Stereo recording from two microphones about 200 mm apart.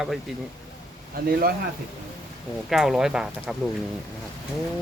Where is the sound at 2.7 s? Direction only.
Centre (ahead or behind).